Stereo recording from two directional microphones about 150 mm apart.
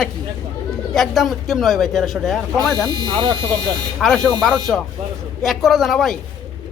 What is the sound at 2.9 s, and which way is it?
Speech, 25° right (ahead or behind).